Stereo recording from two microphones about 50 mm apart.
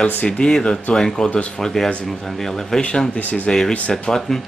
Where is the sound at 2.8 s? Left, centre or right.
Centre.